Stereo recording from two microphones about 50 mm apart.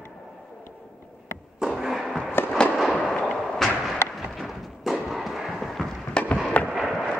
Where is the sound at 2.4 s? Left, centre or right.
Left.